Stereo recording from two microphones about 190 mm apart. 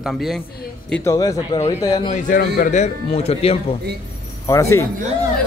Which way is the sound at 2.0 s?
45° left (ahead or behind).